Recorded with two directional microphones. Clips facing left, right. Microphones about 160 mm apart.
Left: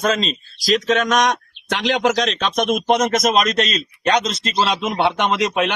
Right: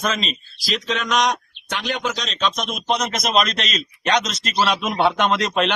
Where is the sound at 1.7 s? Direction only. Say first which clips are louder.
Left 7 dB; 90° left; by 5.7 s 10° left (ahead or behind).